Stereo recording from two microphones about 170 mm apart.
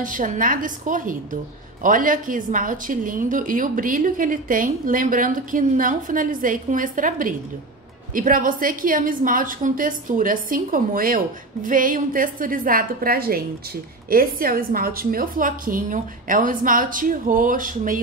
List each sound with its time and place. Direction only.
0.0 s a woman's voice: 50° right (ahead or behind)